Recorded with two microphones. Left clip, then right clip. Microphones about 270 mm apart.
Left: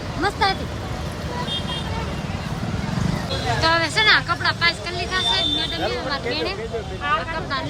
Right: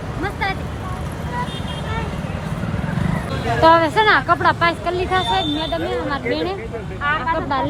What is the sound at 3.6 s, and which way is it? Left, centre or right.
Speech, centre.